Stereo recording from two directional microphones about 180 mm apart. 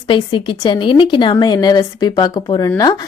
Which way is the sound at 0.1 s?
30° left (ahead or behind).